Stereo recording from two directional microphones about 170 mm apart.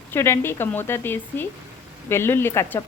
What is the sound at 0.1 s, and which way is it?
Speech, 15° left (ahead or behind).